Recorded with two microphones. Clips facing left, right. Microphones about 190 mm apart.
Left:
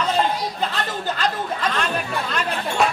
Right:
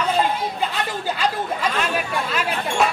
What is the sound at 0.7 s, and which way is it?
Speech, 10° right (ahead or behind).